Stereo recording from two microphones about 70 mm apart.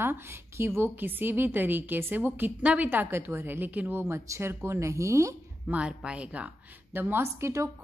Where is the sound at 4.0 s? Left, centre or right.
Right.